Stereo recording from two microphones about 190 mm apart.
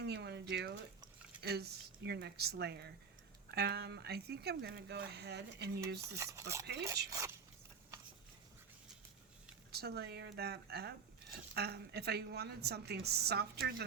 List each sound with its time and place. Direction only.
0.0 s speech: 60° right (ahead or behind)
6.1 s speech: 15° right (ahead or behind)
9.7 s speech: 55° right (ahead or behind)